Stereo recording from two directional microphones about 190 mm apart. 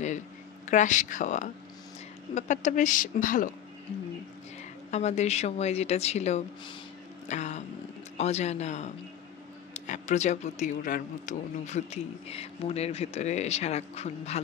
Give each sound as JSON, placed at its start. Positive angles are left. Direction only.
{"t": 0.7, "sound": "a woman's voice", "side_deg": 40}
{"t": 4.9, "sound": "speech", "side_deg": 35}